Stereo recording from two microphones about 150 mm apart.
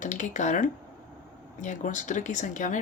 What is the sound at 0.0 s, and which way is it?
Speech, 55° left (ahead or behind).